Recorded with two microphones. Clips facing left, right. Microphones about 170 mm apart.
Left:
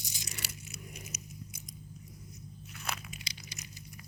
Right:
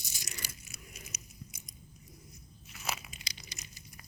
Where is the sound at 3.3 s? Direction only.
40° right (ahead or behind).